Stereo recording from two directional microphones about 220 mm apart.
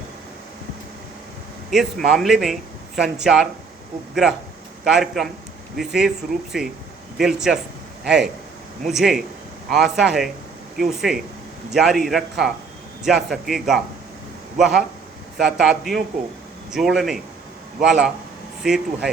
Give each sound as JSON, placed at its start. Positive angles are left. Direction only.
{"t": 1.7, "sound": "speech", "side_deg": 0}